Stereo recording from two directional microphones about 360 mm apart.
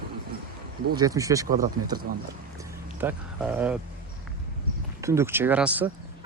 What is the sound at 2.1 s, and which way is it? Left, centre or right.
Speech, right.